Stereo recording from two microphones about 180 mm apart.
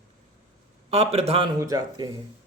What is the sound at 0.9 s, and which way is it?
Speech, 35° right (ahead or behind).